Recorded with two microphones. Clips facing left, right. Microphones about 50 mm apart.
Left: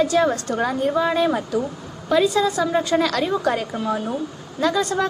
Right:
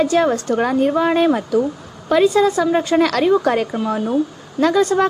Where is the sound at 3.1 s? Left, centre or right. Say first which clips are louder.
Right 6 dB; right.